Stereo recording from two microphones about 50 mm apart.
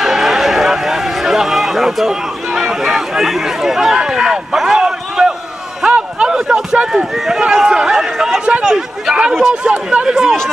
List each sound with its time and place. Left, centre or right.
0.0 s run: centre
5.9 s a sound: centre
7.2 s chatter: centre
8.7 s speech: centre